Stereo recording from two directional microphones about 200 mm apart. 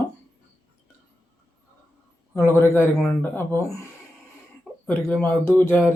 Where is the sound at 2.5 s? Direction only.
10° left (ahead or behind).